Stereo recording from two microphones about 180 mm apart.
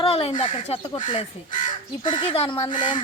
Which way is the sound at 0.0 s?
30° left (ahead or behind).